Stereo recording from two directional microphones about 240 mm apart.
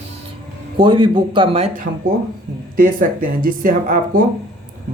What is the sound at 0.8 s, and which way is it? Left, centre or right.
Speech, right.